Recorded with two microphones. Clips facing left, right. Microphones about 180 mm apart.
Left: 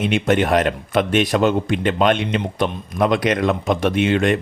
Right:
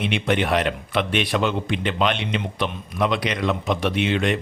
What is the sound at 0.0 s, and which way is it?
Speech, 45° left (ahead or behind).